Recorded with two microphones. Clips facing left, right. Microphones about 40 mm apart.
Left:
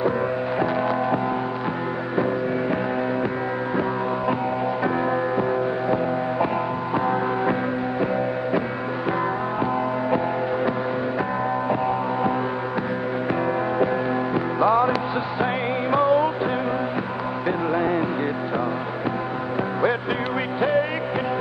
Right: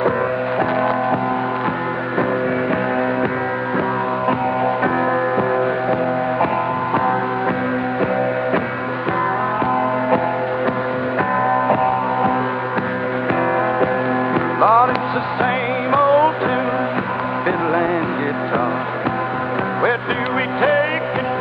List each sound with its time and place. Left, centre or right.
11.4 s music: right
14.6 s music: right